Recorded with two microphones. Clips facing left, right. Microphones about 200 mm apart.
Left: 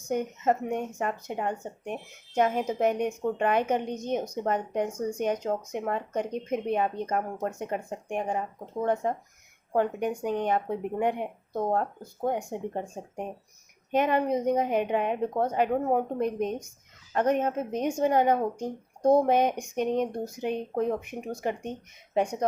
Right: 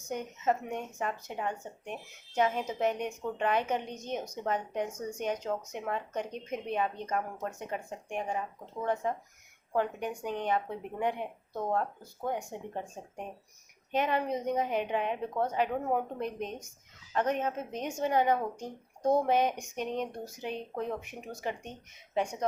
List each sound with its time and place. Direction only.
0.1 s speech: 50° left (ahead or behind)